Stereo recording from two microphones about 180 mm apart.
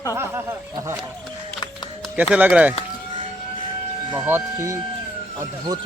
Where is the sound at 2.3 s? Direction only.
5° right (ahead or behind).